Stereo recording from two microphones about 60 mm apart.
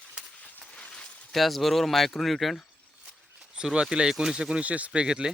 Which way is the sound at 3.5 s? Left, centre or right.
Centre.